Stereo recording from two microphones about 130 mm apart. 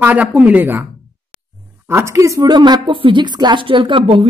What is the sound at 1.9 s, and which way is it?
A woman's voice, 20° right (ahead or behind).